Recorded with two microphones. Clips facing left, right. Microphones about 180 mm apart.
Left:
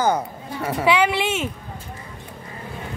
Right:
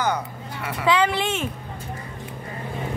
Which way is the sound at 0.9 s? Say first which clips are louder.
Left 1 dB; 10° left (ahead or behind).